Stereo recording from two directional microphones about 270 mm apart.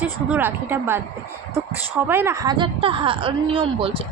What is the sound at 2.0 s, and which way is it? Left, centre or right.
A woman's voice, centre.